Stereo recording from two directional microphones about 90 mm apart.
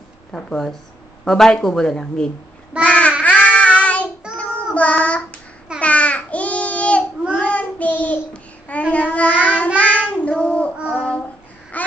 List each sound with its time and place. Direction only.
0.3 s speech: 5° left (ahead or behind)
2.8 s child singing: 15° left (ahead or behind)
4.7 s speech: 15° left (ahead or behind)
5.8 s babbling: 15° left (ahead or behind)
7.3 s child singing: 15° left (ahead or behind)
11.7 s babbling: 15° left (ahead or behind)